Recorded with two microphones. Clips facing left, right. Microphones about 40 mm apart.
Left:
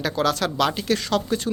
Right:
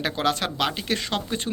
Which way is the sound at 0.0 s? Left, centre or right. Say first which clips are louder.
Left 2 dB; right.